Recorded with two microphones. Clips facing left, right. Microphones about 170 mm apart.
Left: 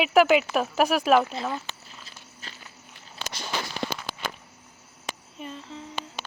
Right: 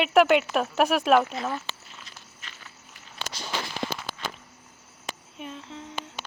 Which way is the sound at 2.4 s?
30° left (ahead or behind).